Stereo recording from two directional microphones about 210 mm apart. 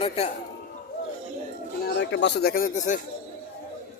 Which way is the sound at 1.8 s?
55° left (ahead or behind).